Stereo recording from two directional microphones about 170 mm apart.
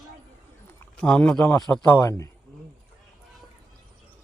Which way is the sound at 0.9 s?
5° left (ahead or behind).